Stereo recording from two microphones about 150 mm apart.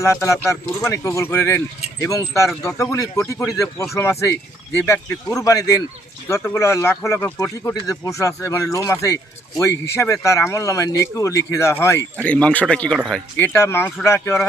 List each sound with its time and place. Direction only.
0.0 s speech: 20° left (ahead or behind); by 13.2 s centre (ahead or behind)
13.4 s speech: 15° left (ahead or behind)